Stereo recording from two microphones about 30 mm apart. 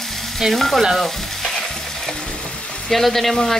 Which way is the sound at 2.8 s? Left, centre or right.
Centre.